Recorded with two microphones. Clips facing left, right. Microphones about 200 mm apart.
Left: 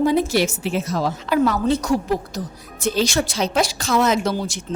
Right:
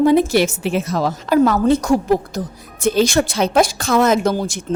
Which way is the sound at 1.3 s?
50° right (ahead or behind).